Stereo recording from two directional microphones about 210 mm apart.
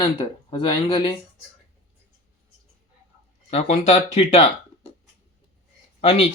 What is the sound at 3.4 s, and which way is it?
Speech, 30° left (ahead or behind).